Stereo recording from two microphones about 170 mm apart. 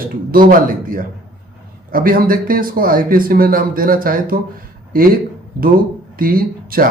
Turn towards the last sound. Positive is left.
turn(degrees=-60)  # may be behind; listen again after turning